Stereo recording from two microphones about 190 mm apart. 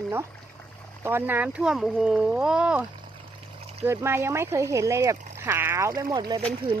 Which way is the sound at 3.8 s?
15° right (ahead or behind).